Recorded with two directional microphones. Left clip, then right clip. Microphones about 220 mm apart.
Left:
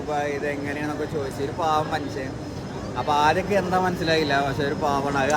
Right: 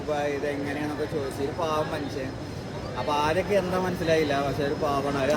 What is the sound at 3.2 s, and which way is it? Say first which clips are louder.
Speech: left 4 dB; 15° left (ahead or behind).